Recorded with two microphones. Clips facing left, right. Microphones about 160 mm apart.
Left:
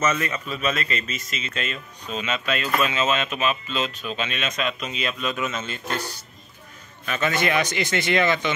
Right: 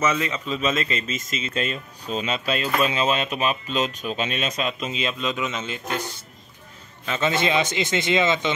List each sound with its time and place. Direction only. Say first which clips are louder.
0.0 s speech: right 1 dB; 15° right (ahead or behind)